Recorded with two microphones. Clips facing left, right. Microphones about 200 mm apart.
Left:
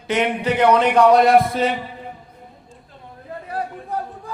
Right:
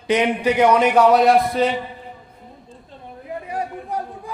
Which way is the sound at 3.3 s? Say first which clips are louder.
Right 3 dB; 15° right (ahead or behind).